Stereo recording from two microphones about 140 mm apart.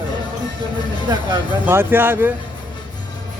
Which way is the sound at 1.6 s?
15° right (ahead or behind).